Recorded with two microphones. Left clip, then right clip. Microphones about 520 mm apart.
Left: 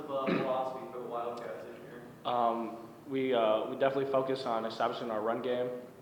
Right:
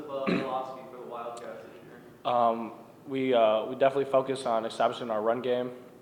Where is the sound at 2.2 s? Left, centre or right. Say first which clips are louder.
Right 5 dB; right.